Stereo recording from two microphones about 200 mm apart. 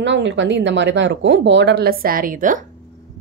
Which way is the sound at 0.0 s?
60° right (ahead or behind).